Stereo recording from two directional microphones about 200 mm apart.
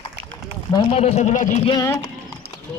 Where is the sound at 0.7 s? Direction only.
30° left (ahead or behind).